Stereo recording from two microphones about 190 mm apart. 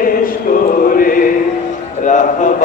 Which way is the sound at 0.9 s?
45° left (ahead or behind).